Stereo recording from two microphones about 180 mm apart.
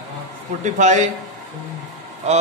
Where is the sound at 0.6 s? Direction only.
40° right (ahead or behind).